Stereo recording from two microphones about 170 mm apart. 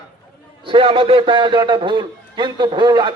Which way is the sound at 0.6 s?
30° right (ahead or behind).